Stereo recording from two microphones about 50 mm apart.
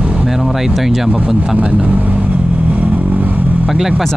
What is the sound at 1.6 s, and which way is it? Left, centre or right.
Vehicle, right.